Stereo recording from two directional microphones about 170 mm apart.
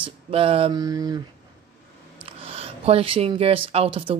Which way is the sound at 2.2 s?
35° right (ahead or behind).